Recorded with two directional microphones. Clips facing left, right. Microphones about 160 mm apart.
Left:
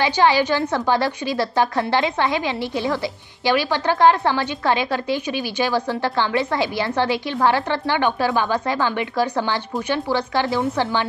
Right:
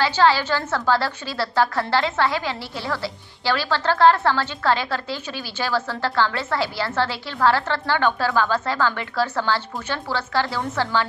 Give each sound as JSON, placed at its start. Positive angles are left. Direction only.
{"t": 0.0, "sound": "a woman's voice", "side_deg": 15}